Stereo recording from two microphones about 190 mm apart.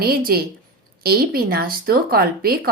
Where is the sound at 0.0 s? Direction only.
50° right (ahead or behind).